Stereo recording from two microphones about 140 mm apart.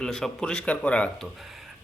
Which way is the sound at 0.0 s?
5° left (ahead or behind).